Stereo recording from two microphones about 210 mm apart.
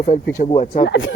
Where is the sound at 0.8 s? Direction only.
60° left (ahead or behind).